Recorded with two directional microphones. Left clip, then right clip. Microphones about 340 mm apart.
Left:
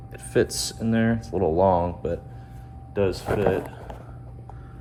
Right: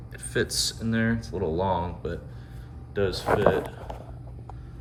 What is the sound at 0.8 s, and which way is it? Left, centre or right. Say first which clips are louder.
Speech: left 3 dB; left.